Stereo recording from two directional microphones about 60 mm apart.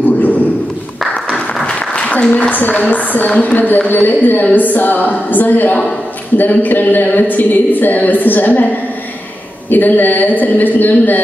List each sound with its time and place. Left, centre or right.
0.0 s a sound: left
1.5 s applause: centre
2.3 s speech: left